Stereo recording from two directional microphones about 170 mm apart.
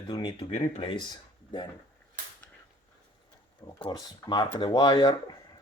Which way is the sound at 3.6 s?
25° left (ahead or behind).